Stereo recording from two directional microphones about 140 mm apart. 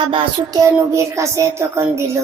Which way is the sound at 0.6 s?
20° right (ahead or behind).